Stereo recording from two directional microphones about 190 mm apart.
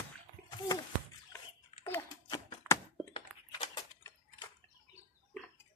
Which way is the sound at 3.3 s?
5° right (ahead or behind).